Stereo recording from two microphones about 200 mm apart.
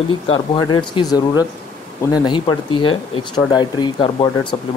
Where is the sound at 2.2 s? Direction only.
25° left (ahead or behind).